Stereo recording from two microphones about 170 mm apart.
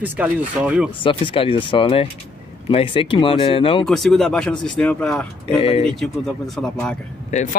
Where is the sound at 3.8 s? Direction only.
Centre (ahead or behind).